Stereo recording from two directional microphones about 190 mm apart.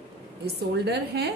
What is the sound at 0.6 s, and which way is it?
Speech, 60° right (ahead or behind).